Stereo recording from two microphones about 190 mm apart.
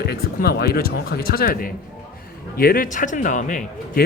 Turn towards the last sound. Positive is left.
turn(degrees=45)  # may be behind; listen again after turning